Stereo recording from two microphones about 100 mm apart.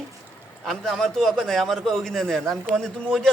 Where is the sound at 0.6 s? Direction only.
Centre (ahead or behind).